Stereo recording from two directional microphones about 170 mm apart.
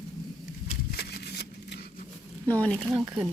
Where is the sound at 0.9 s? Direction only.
70° left (ahead or behind).